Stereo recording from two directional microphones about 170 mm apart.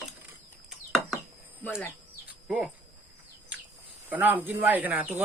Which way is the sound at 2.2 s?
5° right (ahead or behind).